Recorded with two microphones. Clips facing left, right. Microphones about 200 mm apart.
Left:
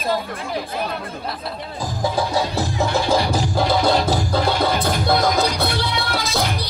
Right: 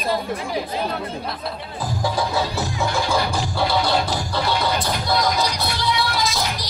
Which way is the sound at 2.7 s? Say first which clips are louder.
Left 3 dB; 35° left (ahead or behind).